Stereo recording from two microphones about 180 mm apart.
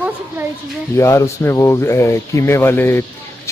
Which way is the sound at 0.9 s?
15° left (ahead or behind).